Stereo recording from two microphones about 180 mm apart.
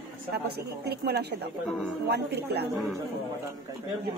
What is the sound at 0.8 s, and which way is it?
A woman's voice, 65° right (ahead or behind).